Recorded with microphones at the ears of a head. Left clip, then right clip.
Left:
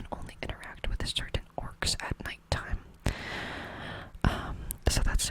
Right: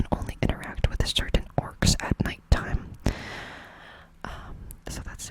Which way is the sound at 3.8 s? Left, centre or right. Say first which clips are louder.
Left 6 dB; left.